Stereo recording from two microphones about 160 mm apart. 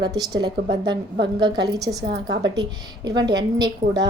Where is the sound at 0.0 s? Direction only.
25° right (ahead or behind).